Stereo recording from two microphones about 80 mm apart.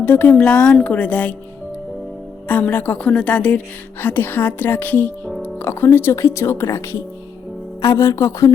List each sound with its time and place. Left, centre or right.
0.0 s a woman's voice: left
2.5 s a woman's voice: centre
4.0 s a woman's voice: left